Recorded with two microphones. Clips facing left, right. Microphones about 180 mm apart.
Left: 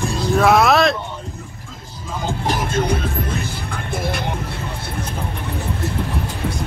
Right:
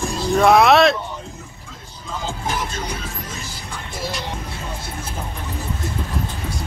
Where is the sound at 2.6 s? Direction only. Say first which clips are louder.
Left 7 dB; 55° left (ahead or behind).